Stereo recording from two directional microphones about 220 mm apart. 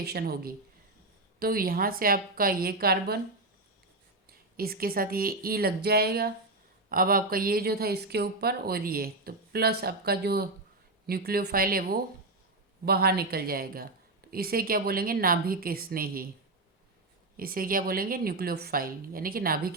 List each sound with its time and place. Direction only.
0.0 s speech: 45° right (ahead or behind)
4.3 s a woman's voice: 45° right (ahead or behind)
17.3 s a woman's voice: 40° right (ahead or behind)